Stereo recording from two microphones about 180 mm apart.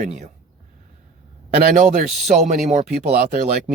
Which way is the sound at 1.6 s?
45° right (ahead or behind).